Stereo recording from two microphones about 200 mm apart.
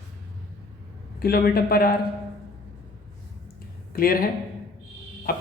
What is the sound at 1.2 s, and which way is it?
Speech, 50° left (ahead or behind).